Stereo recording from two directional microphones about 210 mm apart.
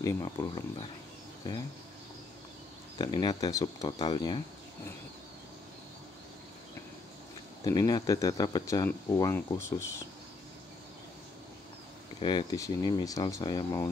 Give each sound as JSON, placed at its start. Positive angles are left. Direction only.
{"t": 0.0, "sound": "speech", "side_deg": 15}
{"t": 3.0, "sound": "speech", "side_deg": 20}
{"t": 7.6, "sound": "speech", "side_deg": 20}
{"t": 12.2, "sound": "speech", "side_deg": 20}